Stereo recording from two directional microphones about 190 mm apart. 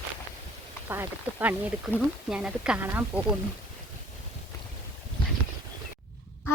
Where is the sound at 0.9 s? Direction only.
10° right (ahead or behind).